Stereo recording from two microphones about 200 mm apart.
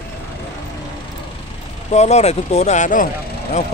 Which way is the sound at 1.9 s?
35° left (ahead or behind).